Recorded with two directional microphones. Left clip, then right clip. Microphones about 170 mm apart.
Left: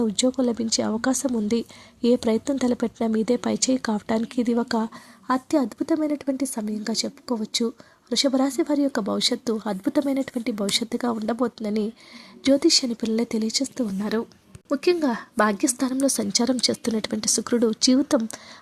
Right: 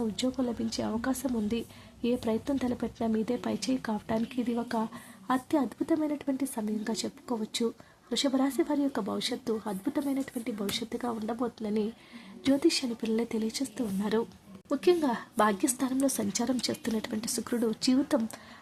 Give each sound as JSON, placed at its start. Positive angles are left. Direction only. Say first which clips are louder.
{"t": 0.0, "sound": "speech", "louder": "left 9 dB", "side_deg": 35}